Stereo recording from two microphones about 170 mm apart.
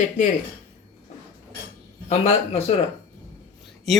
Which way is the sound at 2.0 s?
40° left (ahead or behind).